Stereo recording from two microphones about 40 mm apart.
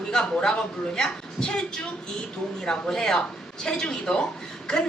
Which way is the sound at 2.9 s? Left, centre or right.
Centre.